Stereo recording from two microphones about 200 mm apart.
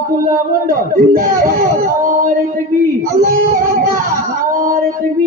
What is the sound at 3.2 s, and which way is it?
Speech, 45° right (ahead or behind).